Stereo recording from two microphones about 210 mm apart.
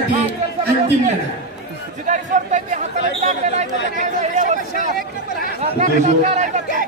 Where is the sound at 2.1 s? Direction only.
35° right (ahead or behind).